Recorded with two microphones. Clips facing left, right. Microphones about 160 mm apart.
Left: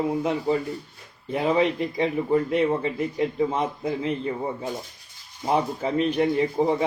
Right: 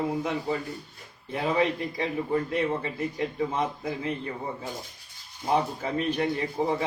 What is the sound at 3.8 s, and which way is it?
Speech, 25° left (ahead or behind).